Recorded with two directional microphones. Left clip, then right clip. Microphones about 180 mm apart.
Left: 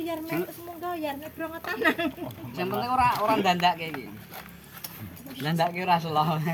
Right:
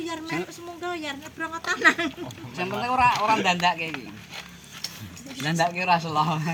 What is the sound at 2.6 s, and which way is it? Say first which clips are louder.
Speech: right 2 dB; centre (ahead or behind).